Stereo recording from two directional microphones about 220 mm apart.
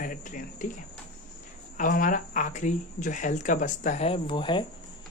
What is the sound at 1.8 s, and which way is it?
Speech, 40° left (ahead or behind).